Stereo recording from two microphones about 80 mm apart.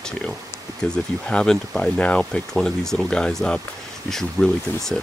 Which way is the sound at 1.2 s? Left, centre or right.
Centre.